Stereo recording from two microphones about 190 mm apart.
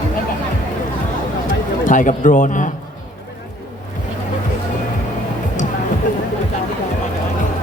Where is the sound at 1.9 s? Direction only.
40° left (ahead or behind).